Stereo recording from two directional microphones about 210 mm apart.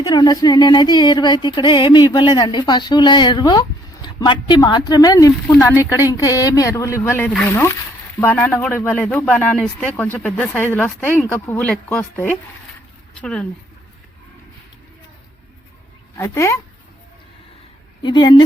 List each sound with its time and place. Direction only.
0.0 s speech: 20° left (ahead or behind); by 13.5 s 5° left (ahead or behind)
16.1 s speech: 15° left (ahead or behind)
18.0 s speech: 20° left (ahead or behind)